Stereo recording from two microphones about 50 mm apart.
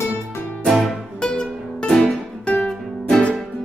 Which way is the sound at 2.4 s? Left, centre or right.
Left.